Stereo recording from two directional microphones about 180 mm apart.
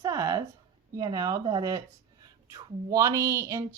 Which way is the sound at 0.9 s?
20° right (ahead or behind).